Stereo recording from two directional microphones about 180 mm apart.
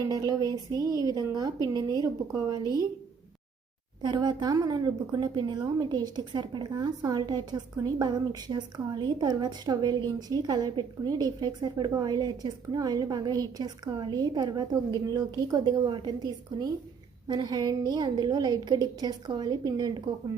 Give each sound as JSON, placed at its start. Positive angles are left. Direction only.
{"t": 0.1, "sound": "a woman's voice", "side_deg": -20}
{"t": 4.0, "sound": "a woman's voice", "side_deg": -25}